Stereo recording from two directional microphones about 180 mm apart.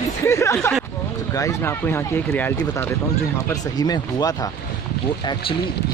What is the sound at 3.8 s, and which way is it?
Speech, 20° left (ahead or behind).